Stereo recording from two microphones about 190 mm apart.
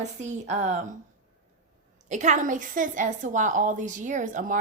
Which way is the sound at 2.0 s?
40° right (ahead or behind).